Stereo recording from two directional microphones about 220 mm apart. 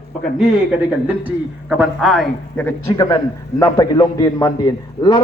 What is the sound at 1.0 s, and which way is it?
Speech, 5° right (ahead or behind).